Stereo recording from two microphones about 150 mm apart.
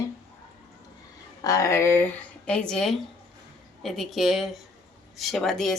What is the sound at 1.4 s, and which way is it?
A woman's voice, 20° left (ahead or behind).